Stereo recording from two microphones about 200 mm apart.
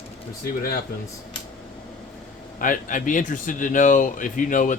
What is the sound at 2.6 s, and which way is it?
A man's voice, 40° left (ahead or behind).